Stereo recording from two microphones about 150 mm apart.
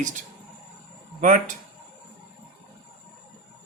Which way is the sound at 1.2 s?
60° right (ahead or behind).